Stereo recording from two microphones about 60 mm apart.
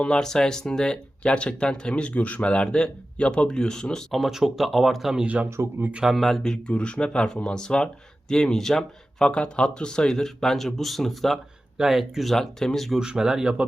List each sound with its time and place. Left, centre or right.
0.0 s speech: centre
4.1 s speech: centre
5.2 s speech: right
6.1 s speech: centre
9.2 s speech: centre
13.0 s speech: centre